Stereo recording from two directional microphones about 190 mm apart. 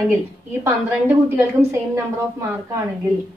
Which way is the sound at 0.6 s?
10° right (ahead or behind).